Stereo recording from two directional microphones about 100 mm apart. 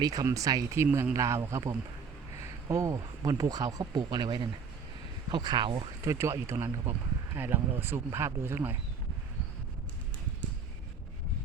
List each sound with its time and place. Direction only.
0.0 s speech: 40° right (ahead or behind)
6.1 s speech: 30° right (ahead or behind)